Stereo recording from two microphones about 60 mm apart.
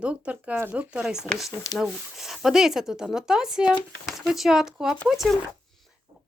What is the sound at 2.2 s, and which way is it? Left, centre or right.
Speech, centre.